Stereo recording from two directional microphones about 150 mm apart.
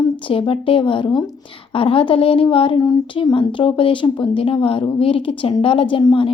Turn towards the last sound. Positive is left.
turn(degrees=35)  # may be behind; listen again after turning